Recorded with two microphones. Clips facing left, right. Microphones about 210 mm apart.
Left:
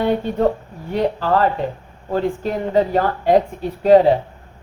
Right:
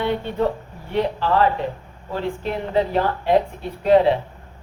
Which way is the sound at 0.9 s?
45° left (ahead or behind).